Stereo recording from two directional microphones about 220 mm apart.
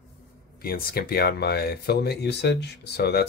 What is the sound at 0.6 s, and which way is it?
Speech, 45° left (ahead or behind).